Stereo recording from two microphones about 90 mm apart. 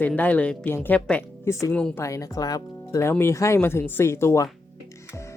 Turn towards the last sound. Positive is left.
turn(degrees=30)  # may be behind; listen again after turning